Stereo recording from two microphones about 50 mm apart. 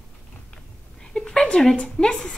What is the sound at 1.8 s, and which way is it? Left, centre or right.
Speech, centre.